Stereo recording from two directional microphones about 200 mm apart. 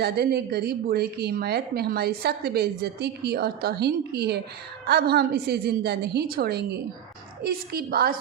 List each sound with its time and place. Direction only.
0.0 s a woman's voice: 55° right (ahead or behind)